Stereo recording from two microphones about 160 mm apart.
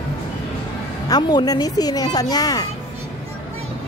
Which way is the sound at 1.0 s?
25° left (ahead or behind).